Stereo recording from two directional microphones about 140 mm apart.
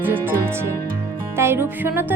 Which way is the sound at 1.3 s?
15° right (ahead or behind).